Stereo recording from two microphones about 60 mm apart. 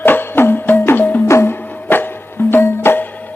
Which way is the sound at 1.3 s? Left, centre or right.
Left.